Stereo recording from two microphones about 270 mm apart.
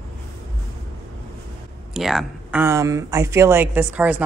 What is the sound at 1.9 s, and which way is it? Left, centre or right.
Speech, centre.